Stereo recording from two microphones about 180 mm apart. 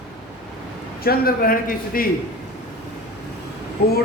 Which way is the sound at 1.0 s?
55° left (ahead or behind).